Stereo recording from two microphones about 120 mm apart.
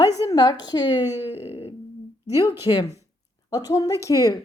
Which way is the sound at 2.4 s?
20° right (ahead or behind).